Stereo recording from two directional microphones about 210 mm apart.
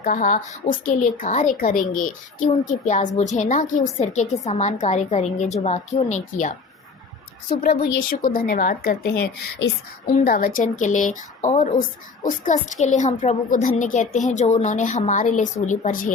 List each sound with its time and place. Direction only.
0.0 s a woman's voice: 40° left (ahead or behind)
7.5 s a woman's voice: 45° left (ahead or behind)